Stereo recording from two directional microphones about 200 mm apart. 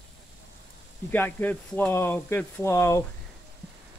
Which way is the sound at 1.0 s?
10° left (ahead or behind).